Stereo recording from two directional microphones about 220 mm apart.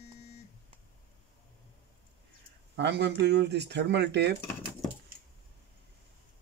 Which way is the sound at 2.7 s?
50° right (ahead or behind).